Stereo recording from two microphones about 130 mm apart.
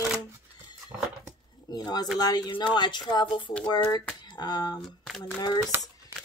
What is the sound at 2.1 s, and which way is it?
Speech, 30° left (ahead or behind).